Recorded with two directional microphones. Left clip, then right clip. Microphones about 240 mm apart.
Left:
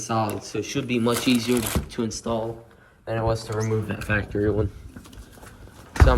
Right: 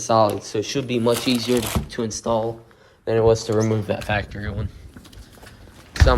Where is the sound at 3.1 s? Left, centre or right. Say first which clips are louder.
Right 9 dB; right.